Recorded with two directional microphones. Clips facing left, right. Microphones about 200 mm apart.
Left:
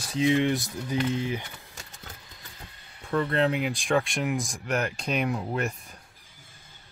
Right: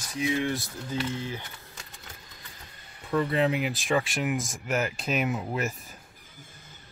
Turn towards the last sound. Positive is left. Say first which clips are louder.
# left 1 dB
turn(degrees=-5)  # may be behind; listen again after turning